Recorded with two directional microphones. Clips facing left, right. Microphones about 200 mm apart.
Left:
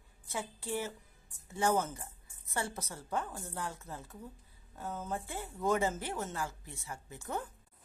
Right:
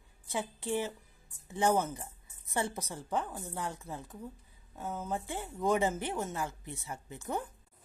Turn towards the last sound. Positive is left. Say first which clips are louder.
# right 3 dB
turn(degrees=-15)  # may be behind; listen again after turning